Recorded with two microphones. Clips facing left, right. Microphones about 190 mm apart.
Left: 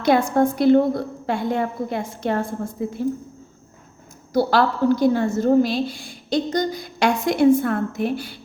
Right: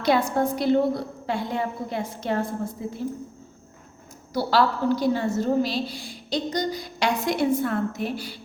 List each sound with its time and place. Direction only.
0.0 s a woman's voice: 50° left (ahead or behind)
4.4 s a woman's voice: 50° left (ahead or behind)